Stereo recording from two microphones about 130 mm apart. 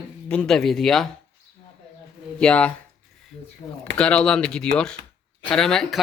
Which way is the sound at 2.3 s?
10° left (ahead or behind).